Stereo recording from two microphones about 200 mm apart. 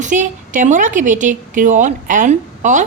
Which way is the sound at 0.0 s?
40° right (ahead or behind).